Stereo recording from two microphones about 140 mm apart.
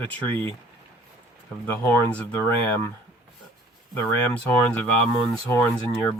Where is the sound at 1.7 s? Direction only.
10° left (ahead or behind).